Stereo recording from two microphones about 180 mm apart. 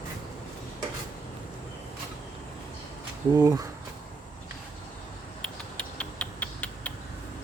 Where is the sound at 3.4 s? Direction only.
20° right (ahead or behind).